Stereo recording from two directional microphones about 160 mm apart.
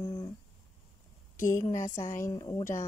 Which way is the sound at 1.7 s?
25° left (ahead or behind).